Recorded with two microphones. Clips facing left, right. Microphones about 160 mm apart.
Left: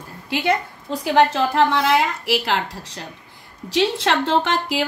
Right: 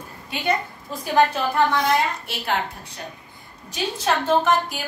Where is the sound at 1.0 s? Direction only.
90° left.